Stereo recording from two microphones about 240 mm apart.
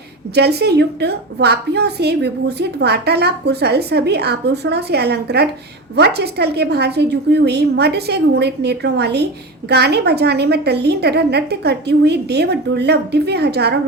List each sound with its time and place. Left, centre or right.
0.3 s a woman's voice: right